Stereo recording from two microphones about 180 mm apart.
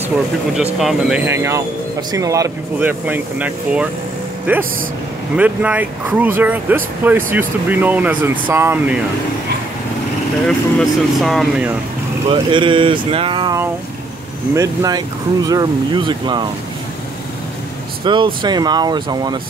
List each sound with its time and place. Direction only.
0.7 s speech: centre (ahead or behind)
1.2 s speech: 15° right (ahead or behind)
10.4 s speech: centre (ahead or behind)
12.3 s speech: 30° right (ahead or behind)
18.0 s speech: 25° right (ahead or behind)